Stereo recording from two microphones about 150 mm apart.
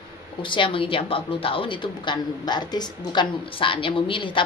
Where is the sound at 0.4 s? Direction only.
35° left (ahead or behind).